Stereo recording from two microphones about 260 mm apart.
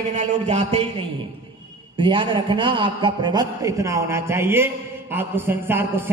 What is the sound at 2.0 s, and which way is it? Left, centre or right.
A woman's voice, centre.